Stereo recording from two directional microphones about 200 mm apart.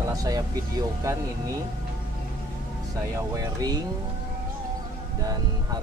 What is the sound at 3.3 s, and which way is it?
Speech, 20° right (ahead or behind).